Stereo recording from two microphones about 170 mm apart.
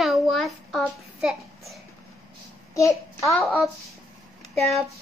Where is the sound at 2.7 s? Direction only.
20° left (ahead or behind).